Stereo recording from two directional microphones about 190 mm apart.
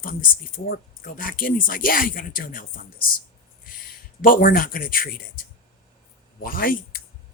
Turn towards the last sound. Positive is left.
turn(degrees=50)  # may be behind; listen again after turning